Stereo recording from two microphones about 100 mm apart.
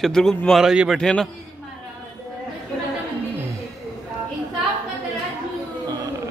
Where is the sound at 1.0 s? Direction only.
5° left (ahead or behind).